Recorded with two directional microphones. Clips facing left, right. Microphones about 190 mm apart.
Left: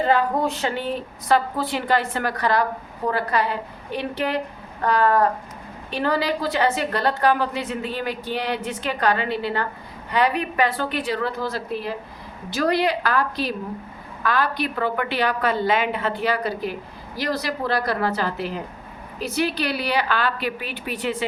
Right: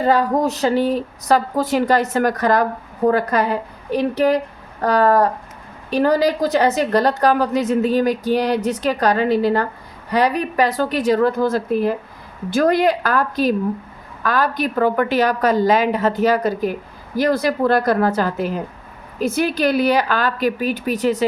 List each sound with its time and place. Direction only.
0.0 s a woman's voice: 40° right (ahead or behind)